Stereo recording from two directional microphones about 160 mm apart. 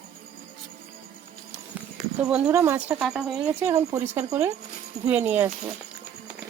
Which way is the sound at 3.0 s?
5° right (ahead or behind).